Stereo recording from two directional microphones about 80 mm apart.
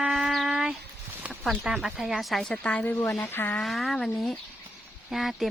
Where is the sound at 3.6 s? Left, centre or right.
Centre.